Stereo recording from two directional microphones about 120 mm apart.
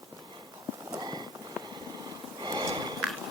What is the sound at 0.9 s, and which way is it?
Clip-clop, 35° right (ahead or behind).